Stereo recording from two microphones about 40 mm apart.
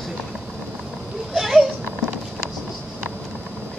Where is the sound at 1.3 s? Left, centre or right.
Centre.